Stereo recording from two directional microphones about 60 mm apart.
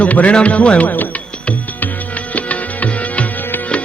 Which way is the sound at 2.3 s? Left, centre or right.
Left.